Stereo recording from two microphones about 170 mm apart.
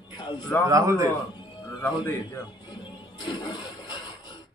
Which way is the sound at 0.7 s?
20° right (ahead or behind).